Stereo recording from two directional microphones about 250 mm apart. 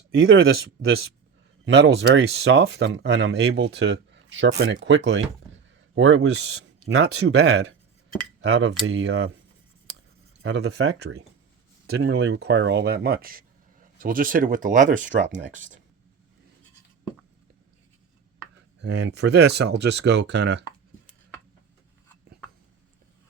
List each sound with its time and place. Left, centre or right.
0.1 s speech: right
1.6 s speech: right
8.4 s speech: right
10.4 s speech: right
11.9 s speech: right
18.8 s speech: right